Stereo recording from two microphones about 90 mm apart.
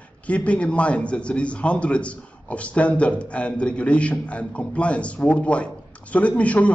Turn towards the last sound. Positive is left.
turn(degrees=15)  # may be behind; listen again after turning